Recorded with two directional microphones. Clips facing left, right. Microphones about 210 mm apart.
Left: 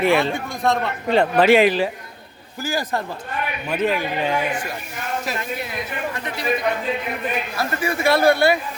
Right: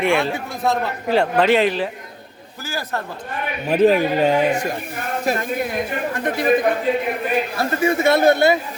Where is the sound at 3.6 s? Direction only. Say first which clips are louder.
Right 8 dB; 35° right (ahead or behind); by 6.5 s 50° right (ahead or behind).